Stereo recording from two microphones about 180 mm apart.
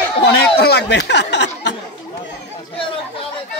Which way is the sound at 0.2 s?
65° left (ahead or behind).